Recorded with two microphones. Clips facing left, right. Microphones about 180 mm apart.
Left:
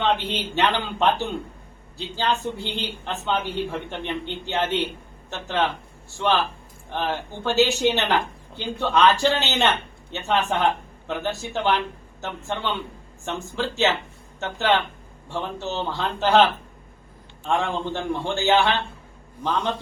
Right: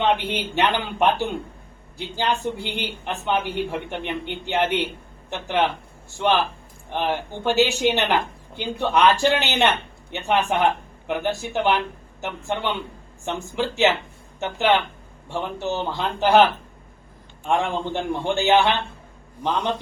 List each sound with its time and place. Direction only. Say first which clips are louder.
0.0 s a woman's voice: right 2 dB; 15° right (ahead or behind)